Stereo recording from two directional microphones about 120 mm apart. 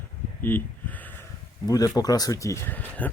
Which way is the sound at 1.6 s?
30° left (ahead or behind).